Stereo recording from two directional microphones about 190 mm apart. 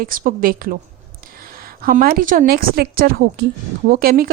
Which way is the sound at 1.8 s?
50° right (ahead or behind).